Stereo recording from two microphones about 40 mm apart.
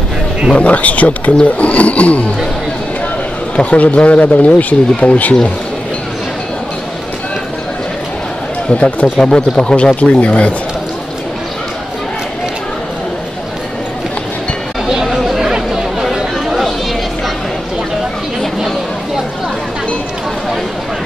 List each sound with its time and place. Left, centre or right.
0.6 s speech: left
3.5 s speech: left
8.6 s speech: left
14.9 s chatter: centre
15.4 s chatter: centre